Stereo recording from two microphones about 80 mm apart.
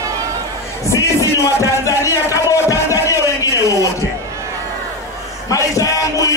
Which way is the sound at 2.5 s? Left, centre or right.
Left.